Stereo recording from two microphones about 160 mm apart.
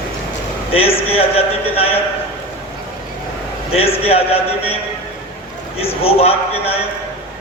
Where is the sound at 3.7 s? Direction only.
40° left (ahead or behind).